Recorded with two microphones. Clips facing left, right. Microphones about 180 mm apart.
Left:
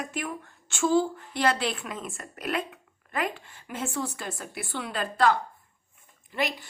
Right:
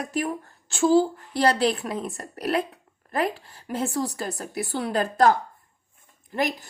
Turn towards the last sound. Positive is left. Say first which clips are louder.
# right 4 dB
turn(degrees=-45)  # may be behind; listen again after turning